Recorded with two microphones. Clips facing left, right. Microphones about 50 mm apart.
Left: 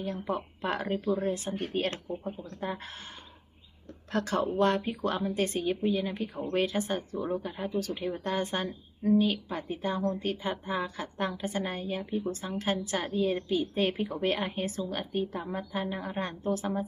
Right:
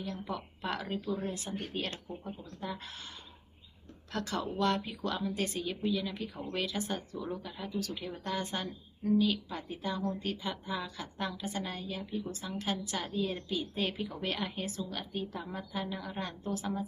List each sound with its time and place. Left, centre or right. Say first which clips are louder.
0.0 s speech: left 6 dB; left
2.1 s speech: left 7 dB; centre
2.6 s speech: left 4 dB; left
4.1 s speech: left 6 dB; left